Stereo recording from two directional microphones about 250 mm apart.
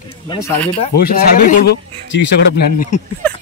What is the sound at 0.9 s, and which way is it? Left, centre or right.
Speech, left.